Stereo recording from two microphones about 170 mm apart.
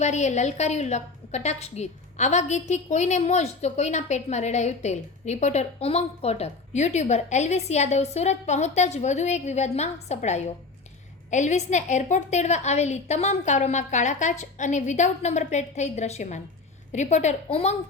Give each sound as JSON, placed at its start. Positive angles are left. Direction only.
{"t": 0.0, "sound": "a woman's voice", "side_deg": 45}